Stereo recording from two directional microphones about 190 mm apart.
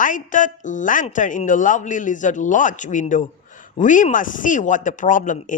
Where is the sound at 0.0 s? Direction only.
45° left (ahead or behind).